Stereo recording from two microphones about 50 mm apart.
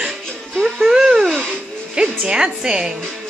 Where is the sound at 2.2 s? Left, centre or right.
Centre.